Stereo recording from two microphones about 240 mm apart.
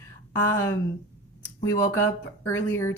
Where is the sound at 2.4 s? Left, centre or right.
Centre.